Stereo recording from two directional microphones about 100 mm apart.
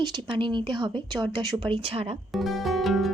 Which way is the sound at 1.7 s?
75° right (ahead or behind).